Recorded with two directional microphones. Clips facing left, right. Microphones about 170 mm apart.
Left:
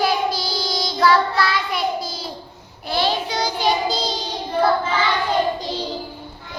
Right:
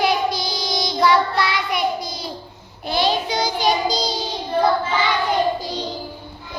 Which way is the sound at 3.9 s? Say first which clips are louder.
Right 1 dB; centre (ahead or behind).